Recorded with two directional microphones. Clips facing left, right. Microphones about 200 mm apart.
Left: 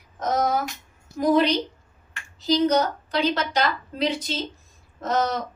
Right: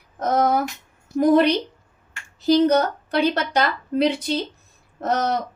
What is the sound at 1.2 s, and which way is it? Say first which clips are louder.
A woman's voice: right 4 dB; 55° right (ahead or behind).